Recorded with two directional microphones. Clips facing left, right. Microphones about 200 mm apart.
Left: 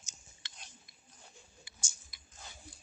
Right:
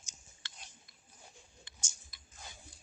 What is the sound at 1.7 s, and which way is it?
Tick-tock, 10° left (ahead or behind).